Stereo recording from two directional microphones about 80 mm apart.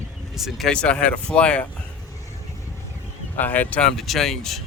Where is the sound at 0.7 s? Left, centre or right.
Centre.